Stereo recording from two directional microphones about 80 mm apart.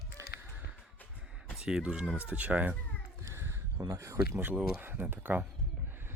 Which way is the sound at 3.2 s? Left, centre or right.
Right.